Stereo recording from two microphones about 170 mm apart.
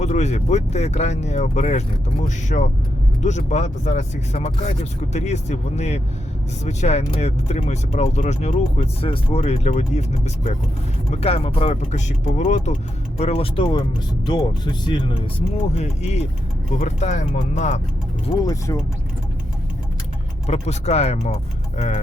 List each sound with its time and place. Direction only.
0.0 s speech: 40° left (ahead or behind)
18.3 s speech: 20° left (ahead or behind)
20.5 s speech: 40° left (ahead or behind)